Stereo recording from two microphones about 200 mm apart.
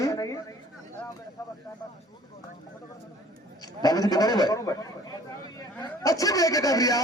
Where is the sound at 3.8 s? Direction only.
20° left (ahead or behind).